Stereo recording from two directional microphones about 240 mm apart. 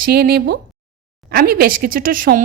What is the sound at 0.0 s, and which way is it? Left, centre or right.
Speech, right.